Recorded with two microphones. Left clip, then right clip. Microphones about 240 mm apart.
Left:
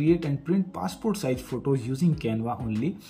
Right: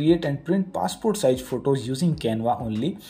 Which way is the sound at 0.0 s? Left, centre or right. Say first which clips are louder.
Right 3 dB; centre.